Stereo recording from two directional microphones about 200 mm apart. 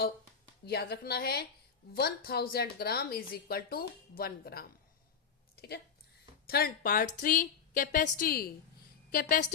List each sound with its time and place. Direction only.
0.6 s speech: 50° left (ahead or behind)
6.5 s a woman's voice: 50° left (ahead or behind)